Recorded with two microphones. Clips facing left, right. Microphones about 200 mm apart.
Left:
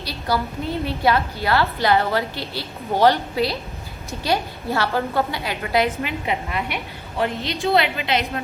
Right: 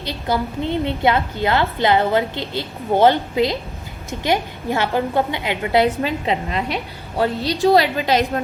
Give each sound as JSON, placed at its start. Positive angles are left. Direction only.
{"t": 0.0, "sound": "a woman's voice", "side_deg": -20}